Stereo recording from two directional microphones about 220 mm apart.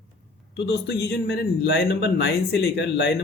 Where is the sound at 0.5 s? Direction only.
50° left (ahead or behind).